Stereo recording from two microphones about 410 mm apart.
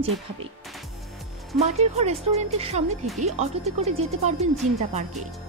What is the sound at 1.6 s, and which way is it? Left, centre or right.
A woman's voice, centre.